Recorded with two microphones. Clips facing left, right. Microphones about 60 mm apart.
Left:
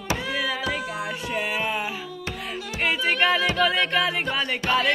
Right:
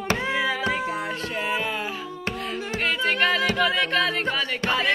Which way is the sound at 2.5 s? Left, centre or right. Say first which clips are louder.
Left 1 dB; centre.